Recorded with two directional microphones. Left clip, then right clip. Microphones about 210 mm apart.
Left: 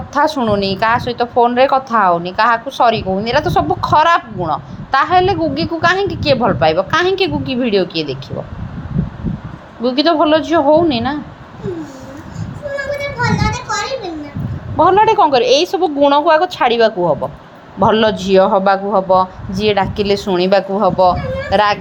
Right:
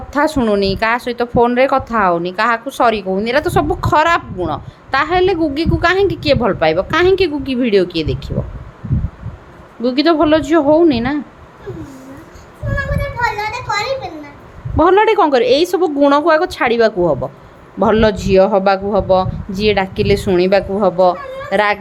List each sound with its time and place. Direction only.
0.1 s speech: 20° right (ahead or behind)
9.8 s speech: 20° right (ahead or behind)
14.8 s speech: 20° right (ahead or behind)